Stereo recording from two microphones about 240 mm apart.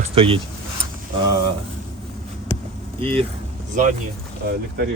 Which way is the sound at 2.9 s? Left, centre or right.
Right.